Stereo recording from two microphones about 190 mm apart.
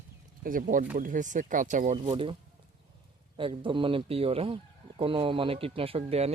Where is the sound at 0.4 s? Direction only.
45° right (ahead or behind).